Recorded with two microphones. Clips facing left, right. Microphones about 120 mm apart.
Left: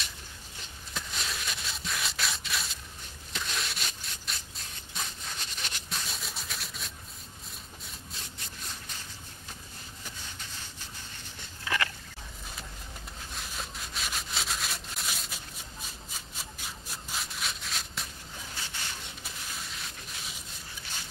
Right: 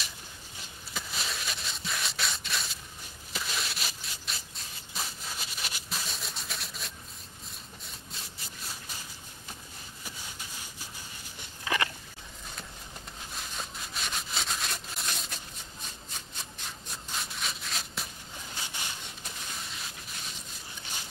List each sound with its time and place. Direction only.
0.9 s a sound: centre (ahead or behind)
7.8 s sawing: centre (ahead or behind)
11.6 s biting: 20° right (ahead or behind)
13.4 s rub: centre (ahead or behind)
16.9 s rub: centre (ahead or behind)
19.8 s a sound: centre (ahead or behind)